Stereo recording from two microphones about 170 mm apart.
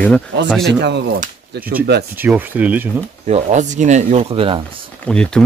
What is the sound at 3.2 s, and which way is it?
Speech, 40° right (ahead or behind).